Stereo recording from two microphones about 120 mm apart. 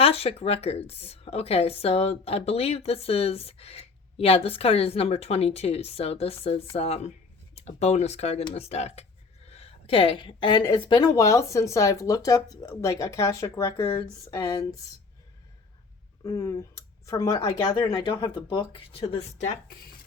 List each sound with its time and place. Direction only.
0.0 s a woman's voice: 55° left (ahead or behind); by 13.8 s 25° left (ahead or behind)
13.8 s speech: 40° left (ahead or behind)
14.3 s speech: 30° left (ahead or behind)
16.2 s speech: 25° left (ahead or behind)
18.9 s speech: 55° left (ahead or behind)